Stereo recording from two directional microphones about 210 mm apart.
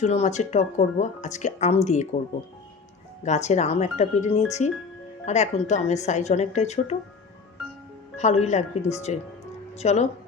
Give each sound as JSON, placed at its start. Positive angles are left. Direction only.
{"t": 0.0, "sound": "speech", "side_deg": 35}
{"t": 3.2, "sound": "speech", "side_deg": 35}
{"t": 8.1, "sound": "speech", "side_deg": 35}